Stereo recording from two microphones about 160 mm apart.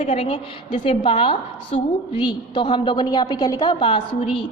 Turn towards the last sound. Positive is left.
turn(degrees=35)  # may be behind; listen again after turning